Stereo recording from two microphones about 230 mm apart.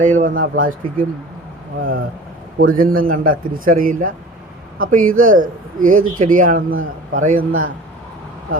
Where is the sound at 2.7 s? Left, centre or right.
Right.